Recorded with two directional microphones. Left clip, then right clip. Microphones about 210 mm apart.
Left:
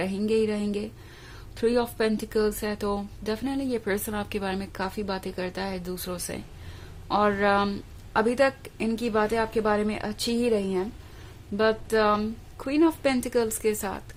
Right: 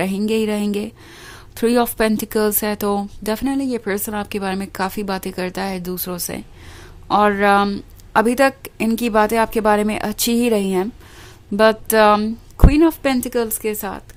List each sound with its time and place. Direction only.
0.0 s a woman's voice: 35° right (ahead or behind)